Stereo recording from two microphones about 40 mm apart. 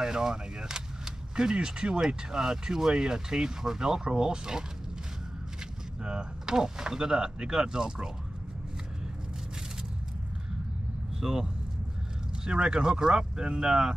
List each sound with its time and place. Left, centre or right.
0.0 s speech: centre
6.0 s speech: right
11.1 s speech: centre